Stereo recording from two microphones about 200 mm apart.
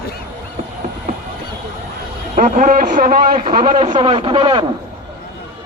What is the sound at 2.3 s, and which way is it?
Speech, 40° right (ahead or behind).